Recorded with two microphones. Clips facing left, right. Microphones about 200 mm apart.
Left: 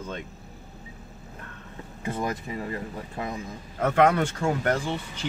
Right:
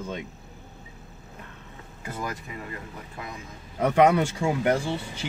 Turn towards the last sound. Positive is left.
turn(degrees=-10)  # may be behind; listen again after turning